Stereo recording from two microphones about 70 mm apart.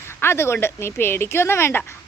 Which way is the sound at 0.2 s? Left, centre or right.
Left.